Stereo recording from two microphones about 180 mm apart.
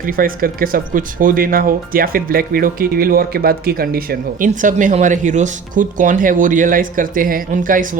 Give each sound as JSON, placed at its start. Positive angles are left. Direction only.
{"t": 0.0, "sound": "speech", "side_deg": -50}